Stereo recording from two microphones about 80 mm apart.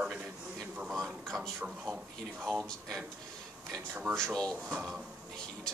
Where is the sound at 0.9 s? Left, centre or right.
Centre.